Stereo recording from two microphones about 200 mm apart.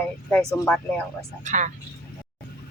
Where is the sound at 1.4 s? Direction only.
40° right (ahead or behind).